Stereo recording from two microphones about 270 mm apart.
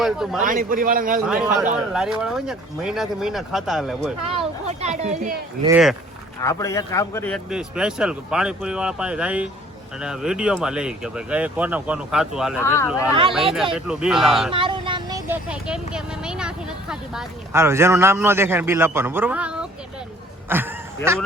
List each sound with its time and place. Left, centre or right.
0.0 s a man's voice: centre
0.4 s a man's voice: right
1.3 s a man's voice: centre
4.3 s speech: right
5.6 s a man's voice: centre
6.4 s a man's voice: centre
12.6 s speech: centre
13.3 s a man's voice: centre
14.5 s speech: centre
20.5 s a sound: centre